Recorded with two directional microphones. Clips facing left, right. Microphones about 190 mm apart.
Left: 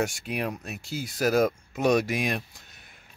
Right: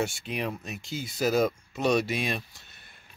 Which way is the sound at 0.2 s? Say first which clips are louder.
Left 1 dB; 5° left (ahead or behind).